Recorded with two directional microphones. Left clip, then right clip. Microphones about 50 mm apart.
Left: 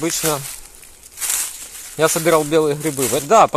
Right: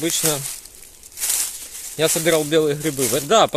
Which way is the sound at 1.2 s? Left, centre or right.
Right.